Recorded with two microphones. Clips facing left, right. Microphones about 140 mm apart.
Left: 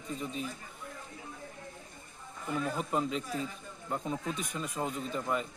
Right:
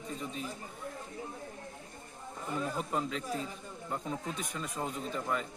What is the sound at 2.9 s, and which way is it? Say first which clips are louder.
Speech: left 2 dB; 15° left (ahead or behind).